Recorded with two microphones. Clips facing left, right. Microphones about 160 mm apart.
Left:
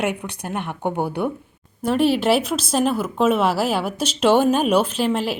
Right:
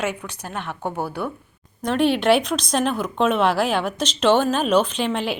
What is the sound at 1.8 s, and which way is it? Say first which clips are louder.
Speech: left 1 dB; 5° left (ahead or behind).